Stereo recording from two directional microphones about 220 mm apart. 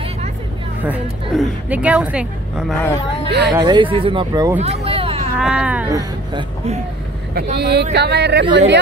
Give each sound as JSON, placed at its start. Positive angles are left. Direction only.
{"t": 0.8, "sound": "a woman's voice", "side_deg": -5}
{"t": 3.3, "sound": "speech", "side_deg": -50}
{"t": 3.5, "sound": "speech", "side_deg": -20}
{"t": 4.6, "sound": "a sound", "side_deg": -30}
{"t": 5.4, "sound": "a woman's voice", "side_deg": -5}
{"t": 7.3, "sound": "speech", "side_deg": -45}